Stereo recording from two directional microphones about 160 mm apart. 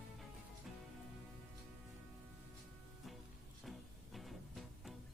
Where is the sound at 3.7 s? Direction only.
Centre (ahead or behind).